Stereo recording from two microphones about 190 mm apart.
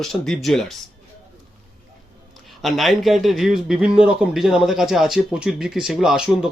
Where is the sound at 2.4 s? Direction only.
Centre (ahead or behind).